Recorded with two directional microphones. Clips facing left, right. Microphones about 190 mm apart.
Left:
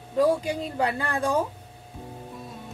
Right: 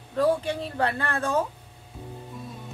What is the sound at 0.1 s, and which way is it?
Speech, 10° left (ahead or behind).